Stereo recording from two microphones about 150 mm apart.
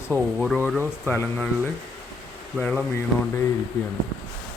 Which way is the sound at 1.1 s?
10° left (ahead or behind).